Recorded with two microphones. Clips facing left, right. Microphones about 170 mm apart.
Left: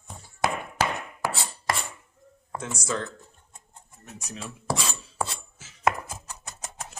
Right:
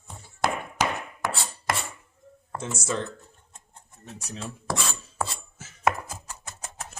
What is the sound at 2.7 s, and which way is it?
Speech, 25° right (ahead or behind).